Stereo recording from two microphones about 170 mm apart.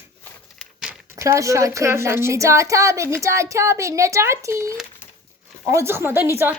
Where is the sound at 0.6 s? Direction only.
5° right (ahead or behind).